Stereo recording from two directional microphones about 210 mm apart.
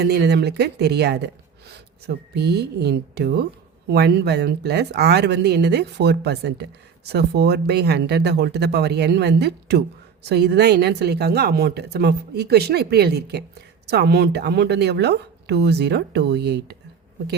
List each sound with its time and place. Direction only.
0.0 s speech: 55° right (ahead or behind)